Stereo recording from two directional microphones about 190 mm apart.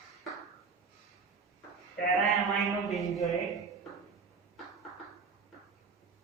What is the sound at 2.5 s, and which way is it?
Speech, centre (ahead or behind).